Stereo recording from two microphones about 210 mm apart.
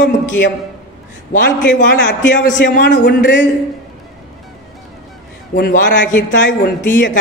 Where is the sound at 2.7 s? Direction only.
55° left (ahead or behind).